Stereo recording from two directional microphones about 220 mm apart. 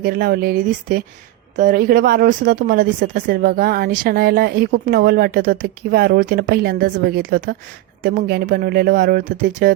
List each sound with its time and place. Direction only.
0.0 s speech: 40° right (ahead or behind)